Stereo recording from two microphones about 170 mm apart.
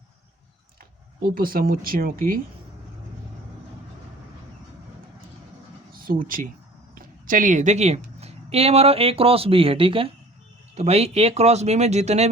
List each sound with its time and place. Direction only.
1.3 s speech: 55° right (ahead or behind)
5.9 s speech: 55° right (ahead or behind); by 12.3 s 40° right (ahead or behind)